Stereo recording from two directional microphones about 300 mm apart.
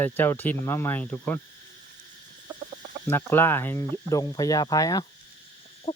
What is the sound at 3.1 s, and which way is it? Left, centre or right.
Speech, centre.